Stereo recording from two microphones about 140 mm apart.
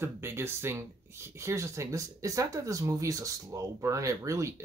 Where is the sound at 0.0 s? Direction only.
15° right (ahead or behind).